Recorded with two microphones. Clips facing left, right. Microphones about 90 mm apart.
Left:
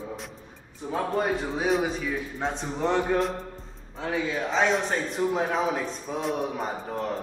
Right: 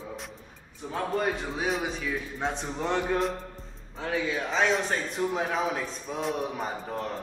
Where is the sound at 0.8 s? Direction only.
15° left (ahead or behind).